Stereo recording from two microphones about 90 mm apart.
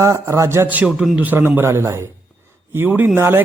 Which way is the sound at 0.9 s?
5° right (ahead or behind).